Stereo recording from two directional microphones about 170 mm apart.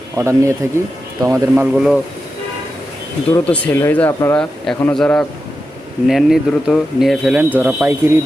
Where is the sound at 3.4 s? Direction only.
10° left (ahead or behind); by 8.1 s 10° right (ahead or behind).